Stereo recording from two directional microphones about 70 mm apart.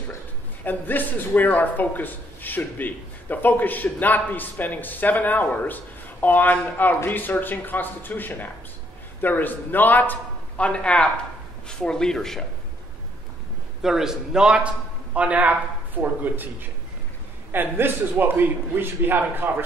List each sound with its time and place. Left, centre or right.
0.7 s a man's voice: left; by 12.4 s centre
13.8 s a man's voice: centre; by 16.4 s right
17.5 s a man's voice: right